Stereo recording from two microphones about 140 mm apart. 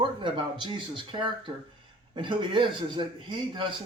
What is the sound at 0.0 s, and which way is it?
Speech, 35° right (ahead or behind).